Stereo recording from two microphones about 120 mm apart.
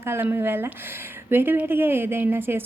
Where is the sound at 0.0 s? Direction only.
20° right (ahead or behind).